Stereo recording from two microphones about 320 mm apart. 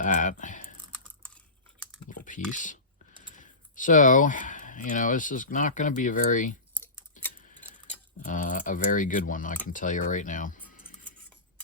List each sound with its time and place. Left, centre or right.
0.0 s typing: left
2.0 s typing: left
3.3 s speech: left
6.7 s a sound: centre
8.3 s speech: left